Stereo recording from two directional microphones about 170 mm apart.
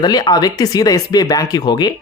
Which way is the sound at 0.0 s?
25° left (ahead or behind).